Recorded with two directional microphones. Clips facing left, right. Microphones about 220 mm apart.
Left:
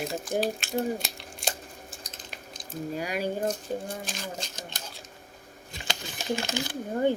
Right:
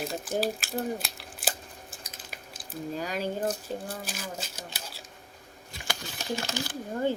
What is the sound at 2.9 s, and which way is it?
Speech, 10° left (ahead or behind).